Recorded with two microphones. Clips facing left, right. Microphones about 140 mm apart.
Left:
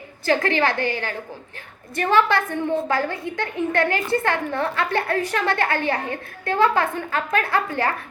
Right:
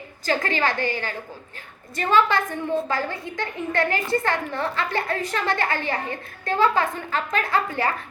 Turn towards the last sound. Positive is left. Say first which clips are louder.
# left 1 dB
turn(degrees=60)  # may be behind; listen again after turning